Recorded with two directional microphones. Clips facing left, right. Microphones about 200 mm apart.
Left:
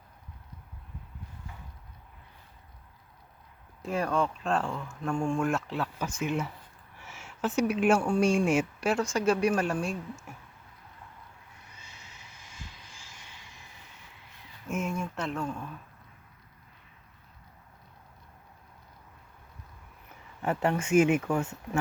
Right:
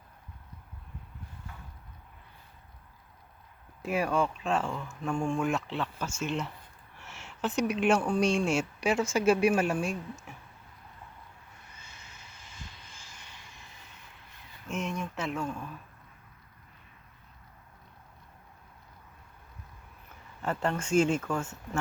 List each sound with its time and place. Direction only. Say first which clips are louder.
3.8 s a woman's voice: even; 10° right (ahead or behind)
5.1 s speech: left 1 dB; 5° left (ahead or behind)
8.8 s a woman's voice: right 1 dB; centre (ahead or behind)
14.7 s speech: left 2 dB; centre (ahead or behind)
20.4 s speech: left 3 dB; 10° left (ahead or behind)
21.2 s speech: left 3 dB; 20° left (ahead or behind)